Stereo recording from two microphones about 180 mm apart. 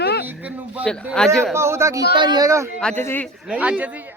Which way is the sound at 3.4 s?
5° right (ahead or behind).